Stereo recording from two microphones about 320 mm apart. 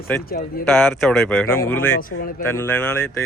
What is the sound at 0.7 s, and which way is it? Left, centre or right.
Speech, centre.